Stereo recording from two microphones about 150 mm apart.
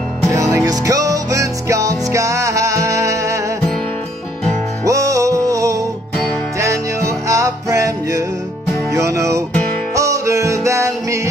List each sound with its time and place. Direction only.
0.3 s music: 20° right (ahead or behind)
4.8 s music: 20° right (ahead or behind)